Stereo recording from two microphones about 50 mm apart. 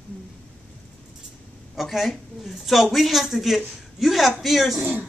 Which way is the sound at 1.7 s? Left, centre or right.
Centre.